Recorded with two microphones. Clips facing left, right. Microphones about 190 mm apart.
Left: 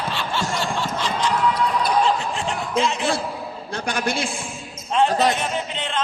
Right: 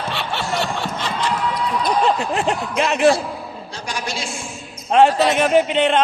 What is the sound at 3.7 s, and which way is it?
Speech, 55° left (ahead or behind).